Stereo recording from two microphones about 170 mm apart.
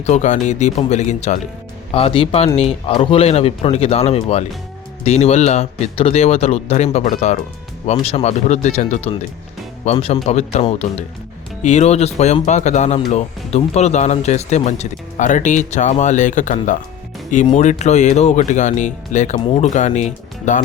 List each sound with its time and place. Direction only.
0.0 s speech: 45° left (ahead or behind)